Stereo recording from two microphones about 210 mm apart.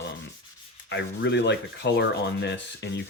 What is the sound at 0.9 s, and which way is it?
Rub, 55° left (ahead or behind).